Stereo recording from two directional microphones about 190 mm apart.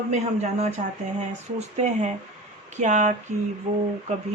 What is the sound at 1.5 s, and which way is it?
A woman's voice, 35° right (ahead or behind).